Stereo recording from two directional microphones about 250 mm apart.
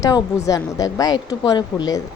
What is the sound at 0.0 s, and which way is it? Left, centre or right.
A woman's voice, centre.